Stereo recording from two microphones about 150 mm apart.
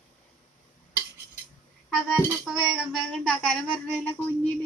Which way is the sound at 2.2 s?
5° right (ahead or behind).